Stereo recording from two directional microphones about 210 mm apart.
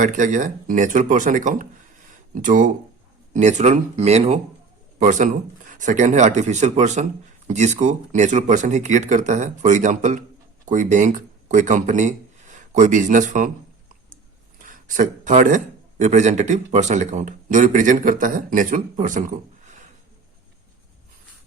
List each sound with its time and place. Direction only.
0.0 s speech: 35° right (ahead or behind)
14.6 s speech: 40° right (ahead or behind)